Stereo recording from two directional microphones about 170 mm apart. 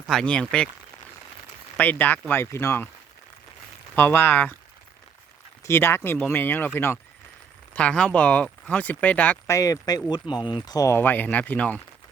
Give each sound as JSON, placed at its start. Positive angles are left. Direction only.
{"t": 0.1, "sound": "speech", "side_deg": 5}
{"t": 1.7, "sound": "speech", "side_deg": 10}
{"t": 3.9, "sound": "speech", "side_deg": 10}
{"t": 5.6, "sound": "speech", "side_deg": 15}
{"t": 9.6, "sound": "speech", "side_deg": 20}